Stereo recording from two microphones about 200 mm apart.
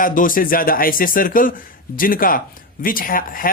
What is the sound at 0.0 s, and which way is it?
Speech, 45° left (ahead or behind).